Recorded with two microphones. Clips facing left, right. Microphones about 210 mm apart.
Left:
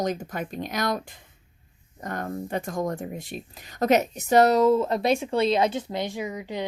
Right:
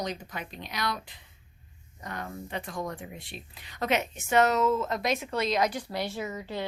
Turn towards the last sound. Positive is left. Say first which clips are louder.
# left 3 dB
turn(degrees=15)  # may be behind; listen again after turning